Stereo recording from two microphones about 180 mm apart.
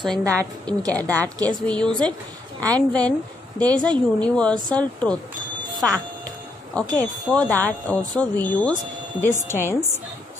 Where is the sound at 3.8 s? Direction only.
25° right (ahead or behind).